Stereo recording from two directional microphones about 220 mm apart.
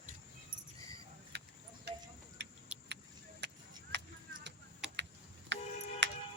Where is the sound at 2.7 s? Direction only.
5° right (ahead or behind).